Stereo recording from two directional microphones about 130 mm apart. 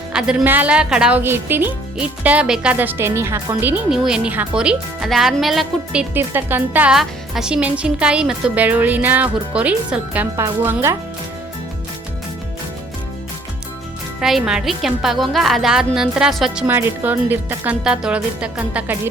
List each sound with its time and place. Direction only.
0.1 s speech: 5° right (ahead or behind)
1.2 s speech: 15° right (ahead or behind)
6.9 s speech: 5° right (ahead or behind)
14.2 s a woman's voice: 5° right (ahead or behind)
16.6 s speech: 15° right (ahead or behind)